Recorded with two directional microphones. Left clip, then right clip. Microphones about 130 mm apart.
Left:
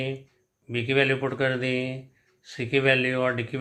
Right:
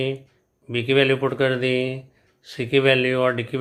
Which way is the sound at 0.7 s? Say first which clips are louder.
Right 4 dB; 35° right (ahead or behind).